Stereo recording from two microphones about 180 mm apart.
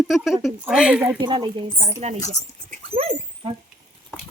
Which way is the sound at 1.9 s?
40° right (ahead or behind).